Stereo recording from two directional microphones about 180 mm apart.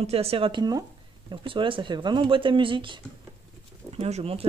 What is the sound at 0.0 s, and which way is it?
Speech, 35° right (ahead or behind).